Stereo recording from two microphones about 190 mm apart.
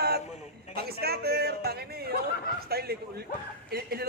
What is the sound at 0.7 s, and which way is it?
A man's voice, 55° right (ahead or behind).